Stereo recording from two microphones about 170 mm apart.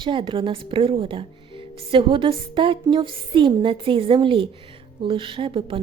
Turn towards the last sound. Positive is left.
turn(degrees=-30)  # may be behind; listen again after turning